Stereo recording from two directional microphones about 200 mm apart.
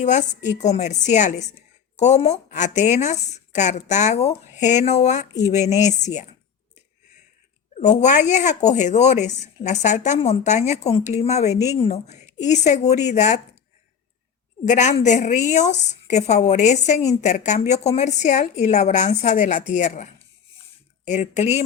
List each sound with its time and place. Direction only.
0.0 s a woman's voice: 35° left (ahead or behind)
7.8 s a woman's voice: 35° left (ahead or behind)
14.6 s a woman's voice: 35° left (ahead or behind)